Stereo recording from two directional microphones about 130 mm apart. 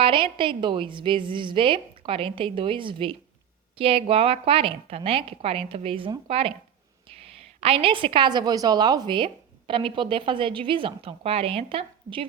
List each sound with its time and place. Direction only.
0.0 s a woman's voice: 40° right (ahead or behind)
7.6 s a woman's voice: 45° right (ahead or behind)